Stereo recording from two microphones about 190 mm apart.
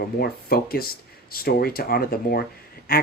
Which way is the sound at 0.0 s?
50° left (ahead or behind).